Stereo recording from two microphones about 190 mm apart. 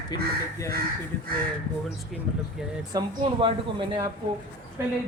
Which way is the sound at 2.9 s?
25° right (ahead or behind).